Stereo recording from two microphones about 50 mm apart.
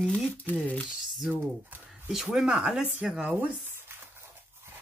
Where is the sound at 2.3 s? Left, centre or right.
Centre.